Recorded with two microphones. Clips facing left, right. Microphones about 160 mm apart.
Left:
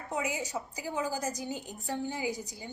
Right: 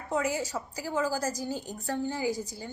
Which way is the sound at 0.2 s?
15° left (ahead or behind).